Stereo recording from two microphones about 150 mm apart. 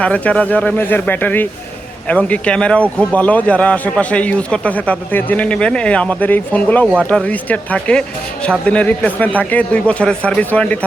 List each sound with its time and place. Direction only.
0.0 s a man's voice: 10° left (ahead or behind)